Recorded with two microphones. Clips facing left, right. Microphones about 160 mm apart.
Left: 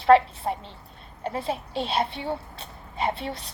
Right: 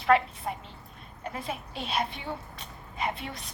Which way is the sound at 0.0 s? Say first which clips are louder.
Left 6 dB; 30° left (ahead or behind).